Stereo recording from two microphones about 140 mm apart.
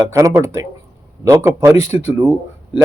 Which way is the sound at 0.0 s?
20° right (ahead or behind).